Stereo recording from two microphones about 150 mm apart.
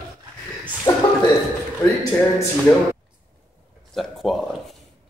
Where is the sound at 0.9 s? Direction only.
25° left (ahead or behind).